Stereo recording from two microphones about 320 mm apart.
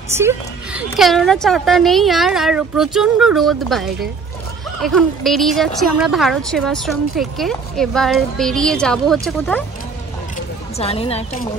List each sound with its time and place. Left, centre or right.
0.1 s a woman's voice: centre
10.8 s a woman's voice: centre